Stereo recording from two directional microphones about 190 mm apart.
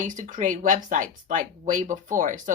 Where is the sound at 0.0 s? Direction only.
40° right (ahead or behind).